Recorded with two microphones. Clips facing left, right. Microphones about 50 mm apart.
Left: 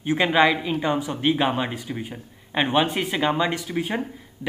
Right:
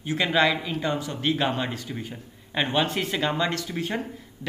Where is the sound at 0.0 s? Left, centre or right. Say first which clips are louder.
Left 4 dB; left.